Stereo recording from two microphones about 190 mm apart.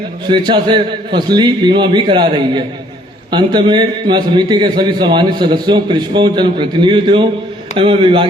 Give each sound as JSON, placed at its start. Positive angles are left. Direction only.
{"t": 0.3, "sound": "a man's voice", "side_deg": -25}